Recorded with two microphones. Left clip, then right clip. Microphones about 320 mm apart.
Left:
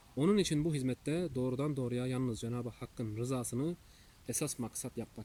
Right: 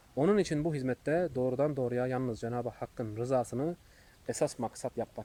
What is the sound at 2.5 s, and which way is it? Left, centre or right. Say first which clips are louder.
Speech: right 7 dB; right.